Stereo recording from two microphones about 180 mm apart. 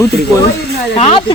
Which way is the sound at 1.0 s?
35° left (ahead or behind).